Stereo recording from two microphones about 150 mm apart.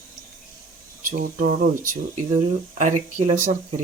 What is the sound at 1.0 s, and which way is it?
Speech, 70° right (ahead or behind).